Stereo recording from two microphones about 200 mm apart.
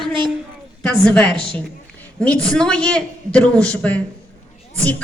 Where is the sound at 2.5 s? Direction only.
5° left (ahead or behind).